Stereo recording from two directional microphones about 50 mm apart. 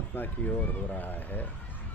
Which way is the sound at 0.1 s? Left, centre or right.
Left.